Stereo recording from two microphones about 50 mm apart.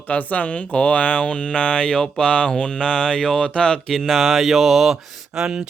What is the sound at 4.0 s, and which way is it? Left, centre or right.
Speech, centre.